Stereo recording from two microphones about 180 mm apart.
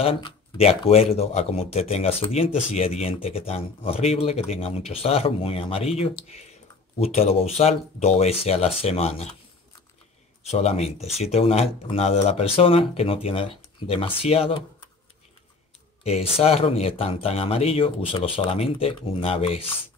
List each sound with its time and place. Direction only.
0.0 s speech: 30° left (ahead or behind)
10.4 s speech: 35° left (ahead or behind)
16.0 s speech: 35° left (ahead or behind)